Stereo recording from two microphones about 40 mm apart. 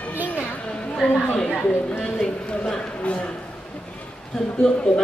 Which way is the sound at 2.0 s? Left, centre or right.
Centre.